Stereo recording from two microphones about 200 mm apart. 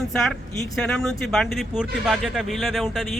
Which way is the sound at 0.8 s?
5° left (ahead or behind).